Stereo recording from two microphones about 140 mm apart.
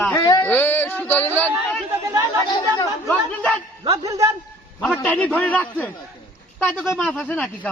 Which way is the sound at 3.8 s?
25° right (ahead or behind).